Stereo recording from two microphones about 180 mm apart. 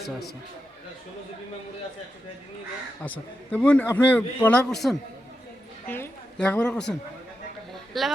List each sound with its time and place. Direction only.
3.0 s a man's voice: 10° left (ahead or behind)
7.9 s speech: centre (ahead or behind)